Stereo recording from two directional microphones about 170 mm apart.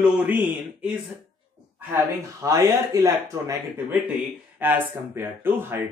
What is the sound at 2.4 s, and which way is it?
Speech, 20° right (ahead or behind).